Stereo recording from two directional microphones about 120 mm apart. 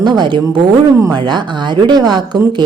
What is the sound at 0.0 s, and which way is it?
A woman's voice, 35° right (ahead or behind).